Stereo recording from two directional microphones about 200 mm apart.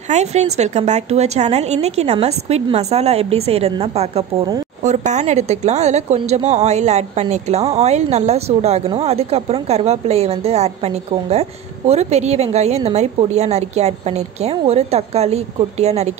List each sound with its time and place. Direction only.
0.1 s a woman's voice: 35° right (ahead or behind)